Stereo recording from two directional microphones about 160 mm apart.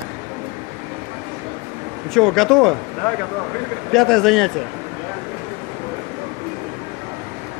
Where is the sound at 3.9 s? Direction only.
Centre (ahead or behind).